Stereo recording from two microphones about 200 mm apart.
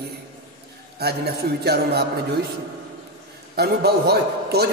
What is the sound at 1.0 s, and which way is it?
A man's voice, 55° right (ahead or behind).